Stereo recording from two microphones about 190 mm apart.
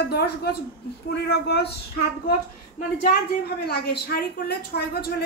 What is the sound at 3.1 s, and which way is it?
A woman's voice, 55° left (ahead or behind).